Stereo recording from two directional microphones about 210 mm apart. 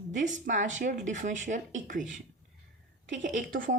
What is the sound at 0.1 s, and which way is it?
Speech, 35° right (ahead or behind).